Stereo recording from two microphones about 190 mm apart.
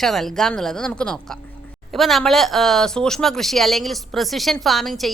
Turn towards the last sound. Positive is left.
turn(degrees=0)  # may be behind; listen again after turning